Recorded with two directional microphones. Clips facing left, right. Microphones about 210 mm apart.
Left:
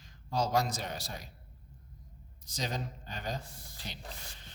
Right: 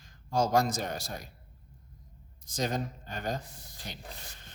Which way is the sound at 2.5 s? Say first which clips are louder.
Right 5 dB; 50° right (ahead or behind).